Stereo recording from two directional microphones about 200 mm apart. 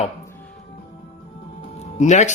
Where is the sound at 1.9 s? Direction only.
35° left (ahead or behind).